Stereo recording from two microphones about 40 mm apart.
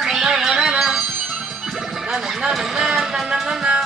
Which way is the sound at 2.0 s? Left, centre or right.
Centre.